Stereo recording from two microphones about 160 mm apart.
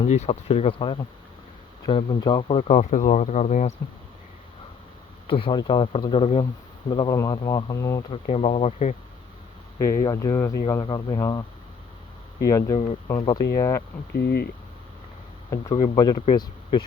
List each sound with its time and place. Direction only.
0.0 s speech: 40° left (ahead or behind)
5.3 s speech: 30° left (ahead or behind)
8.1 s speech: 40° left (ahead or behind)
9.7 s speech: 20° left (ahead or behind)
12.5 s speech: 20° left (ahead or behind)
14.1 s speech: 90° left
15.4 s speech: 20° left (ahead or behind)
15.8 s speech: 35° left (ahead or behind)